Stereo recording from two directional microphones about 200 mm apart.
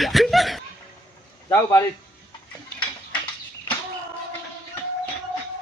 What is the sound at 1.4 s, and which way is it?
Speech, 15° left (ahead or behind).